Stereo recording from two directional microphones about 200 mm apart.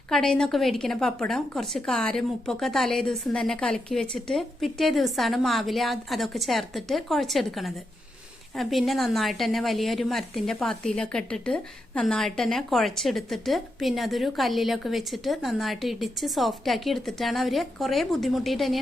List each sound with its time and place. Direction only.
0.1 s a woman's voice: centre (ahead or behind)